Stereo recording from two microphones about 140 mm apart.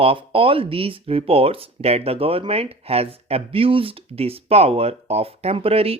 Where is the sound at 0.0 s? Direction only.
40° right (ahead or behind).